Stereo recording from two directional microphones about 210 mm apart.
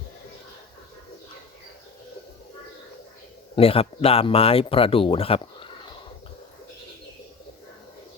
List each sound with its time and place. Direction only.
3.5 s speech: 25° left (ahead or behind)